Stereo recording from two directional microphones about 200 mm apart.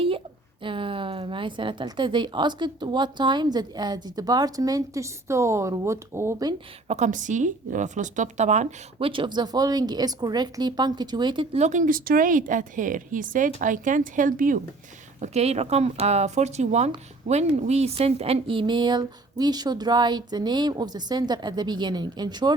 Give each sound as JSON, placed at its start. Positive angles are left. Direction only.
{"t": 0.6, "sound": "speech", "side_deg": -25}
{"t": 6.8, "sound": "a woman's voice", "side_deg": -35}
{"t": 15.2, "sound": "speech", "side_deg": -35}